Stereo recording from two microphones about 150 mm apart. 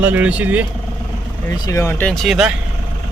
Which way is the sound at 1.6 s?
20° left (ahead or behind).